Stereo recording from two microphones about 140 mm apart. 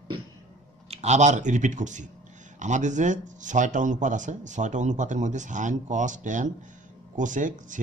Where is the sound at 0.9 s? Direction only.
55° right (ahead or behind).